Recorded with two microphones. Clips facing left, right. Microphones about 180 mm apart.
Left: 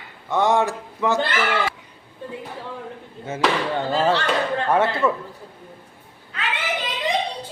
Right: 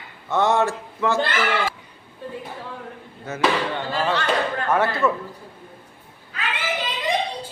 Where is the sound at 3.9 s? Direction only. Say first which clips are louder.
Left 2 dB; 30° left (ahead or behind).